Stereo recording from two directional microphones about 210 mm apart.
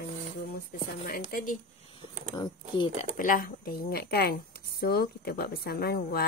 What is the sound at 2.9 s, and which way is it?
A woman's voice, 40° left (ahead or behind).